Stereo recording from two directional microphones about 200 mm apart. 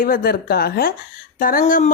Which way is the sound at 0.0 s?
45° left (ahead or behind).